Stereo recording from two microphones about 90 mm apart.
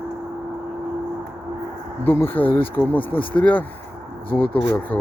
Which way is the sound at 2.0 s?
25° left (ahead or behind).